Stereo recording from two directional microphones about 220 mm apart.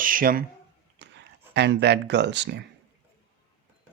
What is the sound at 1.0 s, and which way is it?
Speech, 50° right (ahead or behind).